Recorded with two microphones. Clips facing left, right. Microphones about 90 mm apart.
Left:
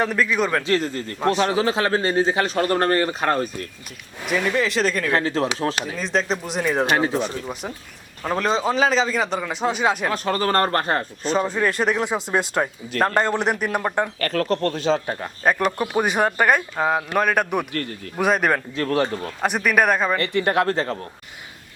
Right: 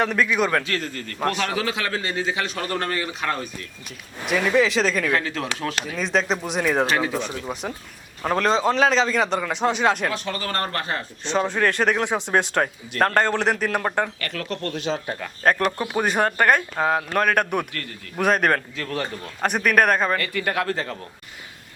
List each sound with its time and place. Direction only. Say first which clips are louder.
0.0 s speech: even; centre (ahead or behind)
0.6 s a man's voice: left 6 dB; 25° left (ahead or behind); by 3.7 s 45° left (ahead or behind)
4.2 s speech: right 2 dB; centre (ahead or behind)
5.1 s a man's voice: left 4 dB; 35° left (ahead or behind)
6.0 s speech: right 2 dB; centre (ahead or behind)
6.9 s a man's voice: left 3 dB; 35° left (ahead or behind)
7.2 s speech: left 2 dB; centre (ahead or behind)
10.1 s speech: left 6 dB; 40° left (ahead or behind)
11.3 s a man's voice: right 1 dB; 5° left (ahead or behind)
14.2 s a man's voice: left 8 dB; 40° left (ahead or behind)
15.4 s speech: even; 10° left (ahead or behind)
18.8 s a man's voice: left 7 dB; 40° left (ahead or behind)
19.4 s speech: even; 5° left (ahead or behind)
20.1 s a man's voice: left 4 dB; 25° left (ahead or behind)